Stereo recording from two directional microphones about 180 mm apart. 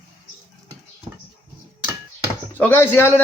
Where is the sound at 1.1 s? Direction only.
30° right (ahead or behind).